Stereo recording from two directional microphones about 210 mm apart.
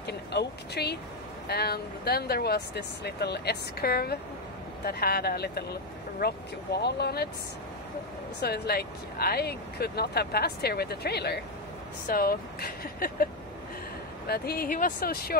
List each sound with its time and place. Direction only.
0.0 s speech: 50° left (ahead or behind)
8.4 s speech: 50° left (ahead or behind)